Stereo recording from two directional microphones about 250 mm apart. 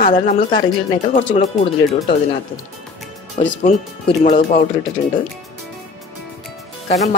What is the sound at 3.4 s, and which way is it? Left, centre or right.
Speech, left.